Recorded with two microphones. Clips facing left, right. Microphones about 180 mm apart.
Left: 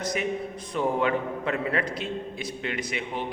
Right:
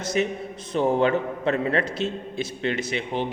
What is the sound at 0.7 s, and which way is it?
A man's voice, 30° right (ahead or behind).